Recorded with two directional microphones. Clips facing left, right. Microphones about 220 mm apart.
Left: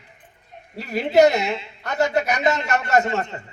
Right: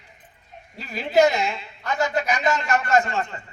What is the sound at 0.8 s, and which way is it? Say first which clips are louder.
A man's voice: left 3 dB; 65° left (ahead or behind).